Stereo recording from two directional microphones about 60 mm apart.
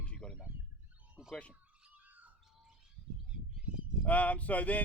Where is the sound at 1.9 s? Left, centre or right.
Right.